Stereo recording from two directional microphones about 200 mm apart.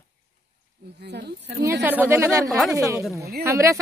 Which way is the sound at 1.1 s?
55° right (ahead or behind).